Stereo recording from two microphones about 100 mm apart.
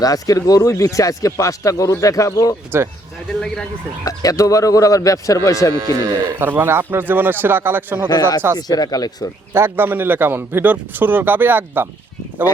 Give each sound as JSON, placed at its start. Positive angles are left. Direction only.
{"t": 0.0, "sound": "speech", "side_deg": 35}
{"t": 3.4, "sound": "speech", "side_deg": 5}
{"t": 4.0, "sound": "speech", "side_deg": 35}
{"t": 5.7, "sound": "speech", "side_deg": -40}
{"t": 6.4, "sound": "a man's voice", "side_deg": -20}
{"t": 8.1, "sound": "speech", "side_deg": 45}
{"t": 9.5, "sound": "a man's voice", "side_deg": -25}